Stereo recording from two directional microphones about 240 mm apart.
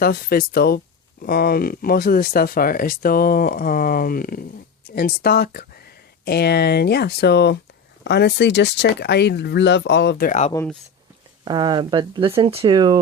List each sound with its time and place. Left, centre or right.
0.0 s speech: left
10.5 s speech: centre
11.4 s speech: centre